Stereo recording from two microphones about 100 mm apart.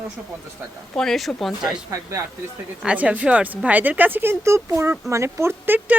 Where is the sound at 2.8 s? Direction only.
10° right (ahead or behind); by 5.8 s 30° right (ahead or behind).